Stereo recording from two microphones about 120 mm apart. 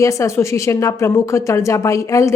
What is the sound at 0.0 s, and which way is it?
Speech, 25° left (ahead or behind).